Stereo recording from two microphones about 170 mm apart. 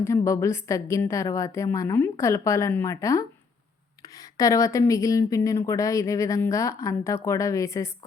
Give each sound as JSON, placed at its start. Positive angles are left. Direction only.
{"t": 0.0, "sound": "speech", "side_deg": 15}